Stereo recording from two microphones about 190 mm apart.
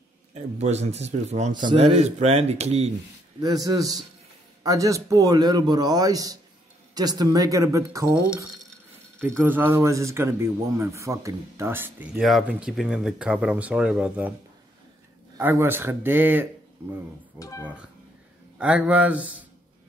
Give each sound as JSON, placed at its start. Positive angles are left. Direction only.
{"t": 0.3, "sound": "speech", "side_deg": -35}
{"t": 3.3, "sound": "a man's voice", "side_deg": -20}
{"t": 8.1, "sound": "speech", "side_deg": -5}
{"t": 9.4, "sound": "a man's voice", "side_deg": -10}
{"t": 15.3, "sound": "a man's voice", "side_deg": -15}
{"t": 17.4, "sound": "speech", "side_deg": 15}
{"t": 18.6, "sound": "a man's voice", "side_deg": -5}